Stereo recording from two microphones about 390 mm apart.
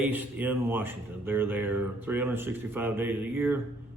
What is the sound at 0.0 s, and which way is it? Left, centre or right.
Speech, centre.